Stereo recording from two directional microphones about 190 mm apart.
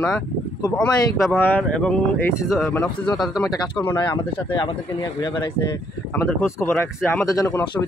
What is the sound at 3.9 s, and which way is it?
Speech, 25° left (ahead or behind).